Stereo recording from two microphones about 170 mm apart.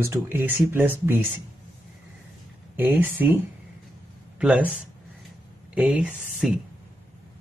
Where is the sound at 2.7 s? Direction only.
10° right (ahead or behind).